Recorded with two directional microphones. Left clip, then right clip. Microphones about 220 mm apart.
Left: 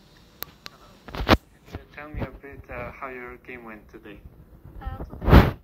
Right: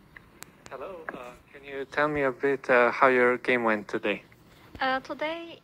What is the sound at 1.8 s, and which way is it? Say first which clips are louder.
Speech: right 12 dB; 50° right (ahead or behind).